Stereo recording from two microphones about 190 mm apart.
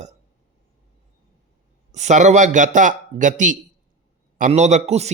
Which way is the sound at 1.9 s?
40° right (ahead or behind).